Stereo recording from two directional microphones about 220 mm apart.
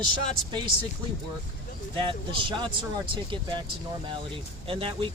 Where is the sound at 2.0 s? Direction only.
20° right (ahead or behind).